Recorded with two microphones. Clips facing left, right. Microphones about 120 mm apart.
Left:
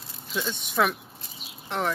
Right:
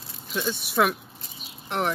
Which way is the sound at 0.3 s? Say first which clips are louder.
Right 2 dB; 5° right (ahead or behind).